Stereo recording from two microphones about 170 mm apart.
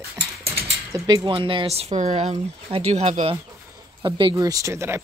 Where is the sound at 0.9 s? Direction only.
25° right (ahead or behind); by 3.3 s 40° right (ahead or behind).